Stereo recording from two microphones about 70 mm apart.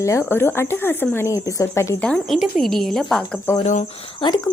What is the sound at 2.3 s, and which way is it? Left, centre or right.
Speech, centre.